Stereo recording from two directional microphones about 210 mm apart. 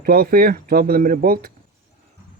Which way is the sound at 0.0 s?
45° right (ahead or behind).